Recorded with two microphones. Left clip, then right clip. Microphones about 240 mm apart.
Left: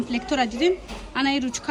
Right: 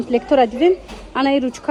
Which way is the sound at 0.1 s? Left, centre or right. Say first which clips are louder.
Right 11 dB; centre.